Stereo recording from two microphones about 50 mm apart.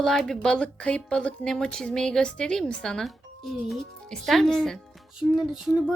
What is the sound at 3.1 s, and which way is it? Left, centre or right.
A woman's voice, centre.